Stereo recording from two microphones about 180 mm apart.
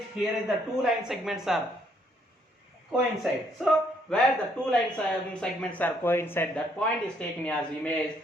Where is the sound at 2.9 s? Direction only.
Centre (ahead or behind).